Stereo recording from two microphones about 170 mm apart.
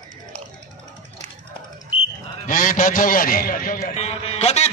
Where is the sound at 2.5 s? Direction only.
50° left (ahead or behind).